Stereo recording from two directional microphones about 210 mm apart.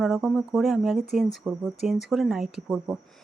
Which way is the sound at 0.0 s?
Centre (ahead or behind).